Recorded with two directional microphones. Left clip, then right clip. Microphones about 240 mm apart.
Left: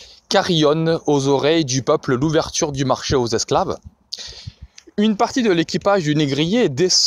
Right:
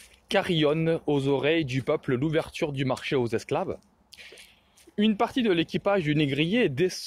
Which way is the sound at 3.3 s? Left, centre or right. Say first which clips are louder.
Left 10 dB; left.